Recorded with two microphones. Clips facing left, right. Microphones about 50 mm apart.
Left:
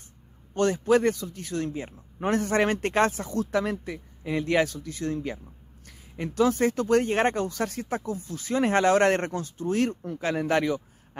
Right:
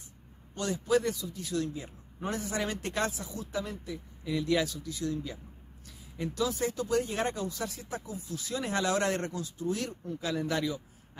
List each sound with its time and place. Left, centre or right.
0.6 s speech: left
4.2 s speech: left